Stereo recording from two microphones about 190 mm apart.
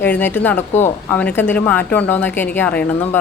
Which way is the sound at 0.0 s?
10° left (ahead or behind).